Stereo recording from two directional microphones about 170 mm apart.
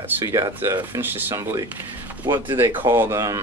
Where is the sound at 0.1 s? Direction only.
15° right (ahead or behind).